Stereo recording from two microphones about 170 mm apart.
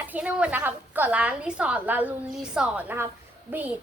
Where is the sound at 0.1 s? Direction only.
5° right (ahead or behind).